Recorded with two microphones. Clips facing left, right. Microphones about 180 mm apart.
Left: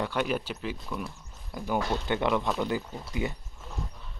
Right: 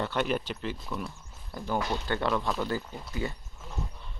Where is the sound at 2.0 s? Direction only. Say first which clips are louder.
Left 3 dB; 20° left (ahead or behind).